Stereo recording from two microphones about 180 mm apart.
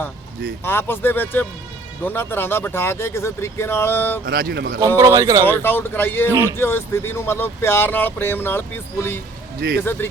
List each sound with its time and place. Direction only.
0.6 s speech: 10° left (ahead or behind)
4.3 s speech: 60° right (ahead or behind)
4.9 s speech: 20° right (ahead or behind)
5.5 s speech: 10° left (ahead or behind)
6.3 s speech: 20° right (ahead or behind)
6.6 s speech: 10° left (ahead or behind)
9.6 s speech: 60° right (ahead or behind)